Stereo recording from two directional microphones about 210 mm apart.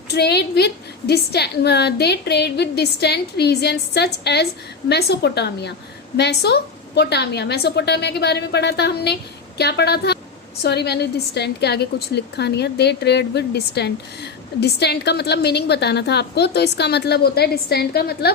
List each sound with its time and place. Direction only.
0.1 s a woman's voice: 50° left (ahead or behind)